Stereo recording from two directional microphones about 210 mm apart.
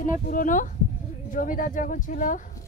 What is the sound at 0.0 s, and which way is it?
Speech, 40° left (ahead or behind).